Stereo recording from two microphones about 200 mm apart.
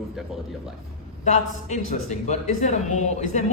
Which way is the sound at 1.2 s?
35° left (ahead or behind).